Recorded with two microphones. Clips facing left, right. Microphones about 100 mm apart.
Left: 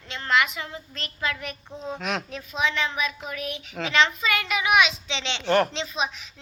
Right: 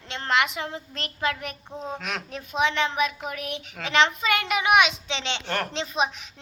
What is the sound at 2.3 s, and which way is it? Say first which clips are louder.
A child's voice: right 2 dB; 60° right (ahead or behind).